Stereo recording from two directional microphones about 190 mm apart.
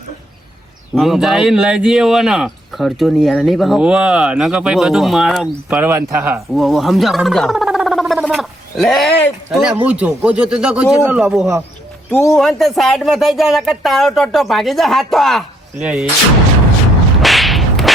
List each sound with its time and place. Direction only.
0.9 s speech: centre (ahead or behind)
6.6 s speech: centre (ahead or behind)
12.1 s speech: 15° left (ahead or behind)
12.4 s speech: centre (ahead or behind)
17.2 s whip: centre (ahead or behind)